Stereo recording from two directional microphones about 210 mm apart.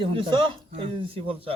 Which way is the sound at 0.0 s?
25° right (ahead or behind).